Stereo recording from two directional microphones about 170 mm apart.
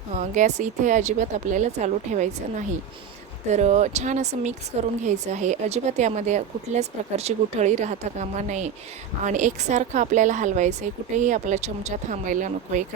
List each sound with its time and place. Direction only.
0.2 s a woman's voice: 45° right (ahead or behind)